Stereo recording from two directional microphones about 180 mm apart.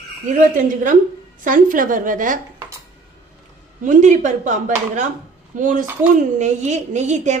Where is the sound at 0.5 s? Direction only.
45° right (ahead or behind).